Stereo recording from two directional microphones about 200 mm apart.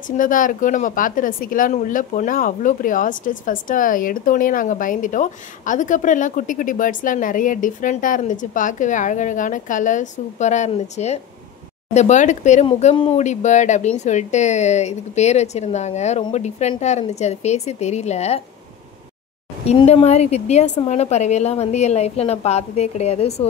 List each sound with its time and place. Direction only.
0.2 s speech: 40° left (ahead or behind)
19.6 s speech: 30° left (ahead or behind)